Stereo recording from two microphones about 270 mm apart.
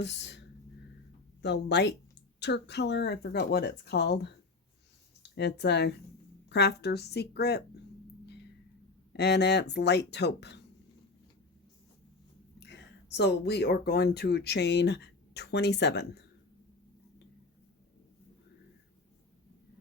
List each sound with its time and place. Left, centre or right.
0.0 s speech: left
5.3 s speech: left
9.1 s speech: left
12.5 s speech: left